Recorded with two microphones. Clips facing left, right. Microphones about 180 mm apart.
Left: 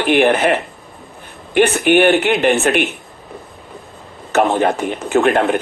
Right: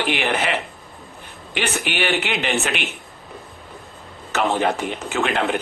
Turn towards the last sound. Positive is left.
turn(degrees=50)  # may be behind; listen again after turning